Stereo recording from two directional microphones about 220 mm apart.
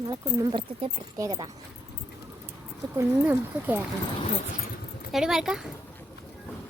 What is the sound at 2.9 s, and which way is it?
Speech, 10° right (ahead or behind).